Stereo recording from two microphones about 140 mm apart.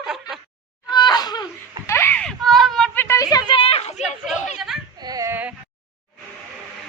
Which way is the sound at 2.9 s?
20° left (ahead or behind).